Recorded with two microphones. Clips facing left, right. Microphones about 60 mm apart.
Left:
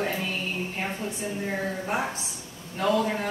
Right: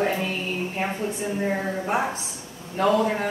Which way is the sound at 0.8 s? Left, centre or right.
Right.